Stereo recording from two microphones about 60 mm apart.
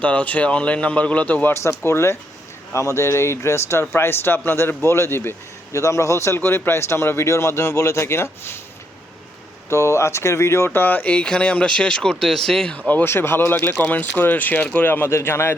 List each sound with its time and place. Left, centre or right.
0.0 s a man's voice: left
1.6 s speech: left
5.7 s speech: left
9.6 s speech: left
10.8 s speech: left; by 12.7 s centre
13.1 s speech: left
15.1 s speech: left